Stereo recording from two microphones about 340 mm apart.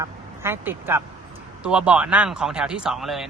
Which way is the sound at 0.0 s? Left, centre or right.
Centre.